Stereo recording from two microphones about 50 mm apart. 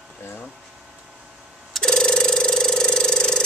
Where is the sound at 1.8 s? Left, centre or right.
Centre.